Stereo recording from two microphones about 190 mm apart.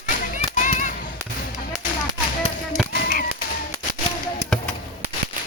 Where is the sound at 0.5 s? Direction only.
40° left (ahead or behind).